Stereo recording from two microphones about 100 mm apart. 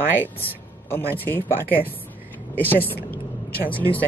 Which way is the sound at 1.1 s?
20° left (ahead or behind).